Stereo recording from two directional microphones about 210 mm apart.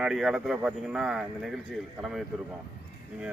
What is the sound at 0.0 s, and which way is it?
Speech, centre (ahead or behind).